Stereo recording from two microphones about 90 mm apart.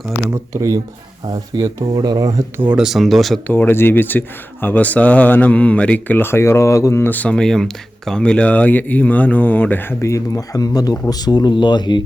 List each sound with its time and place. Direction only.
0.3 s speech: 40° right (ahead or behind)
2.7 s speech: 5° right (ahead or behind)
3.4 s speech: 20° left (ahead or behind)
10.0 s speech: 35° left (ahead or behind); by 12.0 s 55° left (ahead or behind)